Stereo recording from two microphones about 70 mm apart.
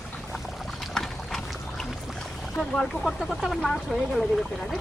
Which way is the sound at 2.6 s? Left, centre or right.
Centre.